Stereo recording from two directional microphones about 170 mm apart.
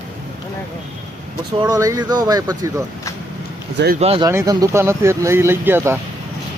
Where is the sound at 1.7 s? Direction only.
20° right (ahead or behind).